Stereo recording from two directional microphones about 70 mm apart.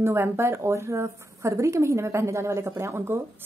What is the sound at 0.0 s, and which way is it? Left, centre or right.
Speech, right.